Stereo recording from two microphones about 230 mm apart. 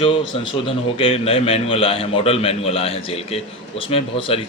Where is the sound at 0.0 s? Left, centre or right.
Left.